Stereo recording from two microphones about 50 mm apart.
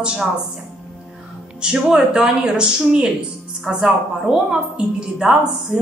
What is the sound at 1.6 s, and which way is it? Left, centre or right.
A woman's voice, centre.